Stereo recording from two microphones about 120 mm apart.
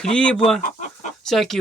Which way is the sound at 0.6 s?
90° left.